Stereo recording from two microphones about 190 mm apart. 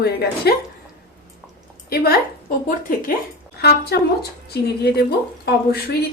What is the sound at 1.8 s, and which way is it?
A woman's voice, 55° left (ahead or behind).